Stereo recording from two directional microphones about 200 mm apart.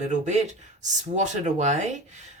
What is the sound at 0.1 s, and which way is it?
Speech, 35° right (ahead or behind).